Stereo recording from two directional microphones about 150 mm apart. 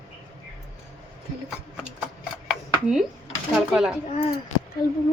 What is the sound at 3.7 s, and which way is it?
Speech, 5° right (ahead or behind).